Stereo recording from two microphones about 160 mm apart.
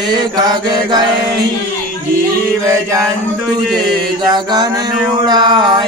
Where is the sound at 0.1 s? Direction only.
25° right (ahead or behind).